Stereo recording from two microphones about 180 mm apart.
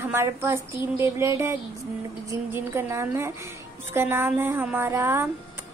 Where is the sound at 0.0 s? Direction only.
15° right (ahead or behind).